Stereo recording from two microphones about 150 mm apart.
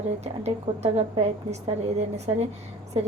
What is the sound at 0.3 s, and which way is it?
A woman's voice, 45° right (ahead or behind).